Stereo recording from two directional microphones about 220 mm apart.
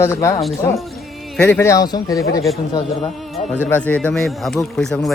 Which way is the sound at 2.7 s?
30° left (ahead or behind).